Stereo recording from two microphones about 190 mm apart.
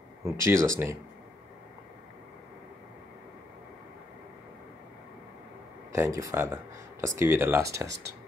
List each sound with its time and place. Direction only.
0.2 s speech: 15° right (ahead or behind)
5.9 s speech: 15° right (ahead or behind)